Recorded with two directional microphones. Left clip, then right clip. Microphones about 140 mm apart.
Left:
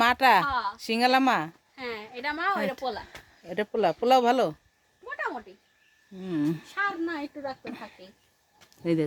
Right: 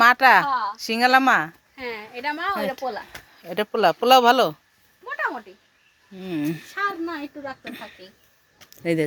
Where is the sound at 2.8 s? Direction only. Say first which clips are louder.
Right 3 dB; 15° right (ahead or behind).